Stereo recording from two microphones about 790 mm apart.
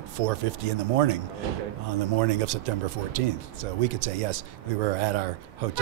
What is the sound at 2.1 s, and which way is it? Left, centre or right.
Speech, right.